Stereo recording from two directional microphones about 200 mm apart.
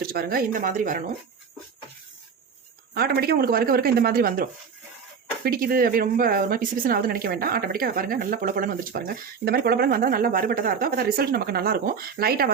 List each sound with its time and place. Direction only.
0.0 s speech: 50° right (ahead or behind)
2.9 s speech: 50° right (ahead or behind)
5.5 s speech: 45° right (ahead or behind)